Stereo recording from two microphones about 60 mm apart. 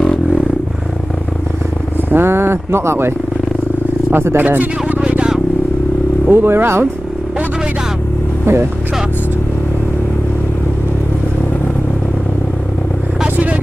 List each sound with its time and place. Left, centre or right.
2.0 s speech: right
4.4 s a sound: right
6.2 s speech: right